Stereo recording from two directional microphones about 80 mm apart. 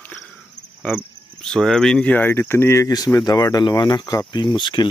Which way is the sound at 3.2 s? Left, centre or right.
Left.